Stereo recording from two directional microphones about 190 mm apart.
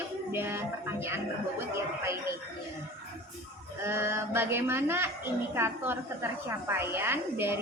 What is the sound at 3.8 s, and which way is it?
Speech, 15° right (ahead or behind).